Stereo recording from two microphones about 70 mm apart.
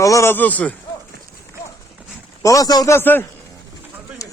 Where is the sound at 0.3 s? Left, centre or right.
Left.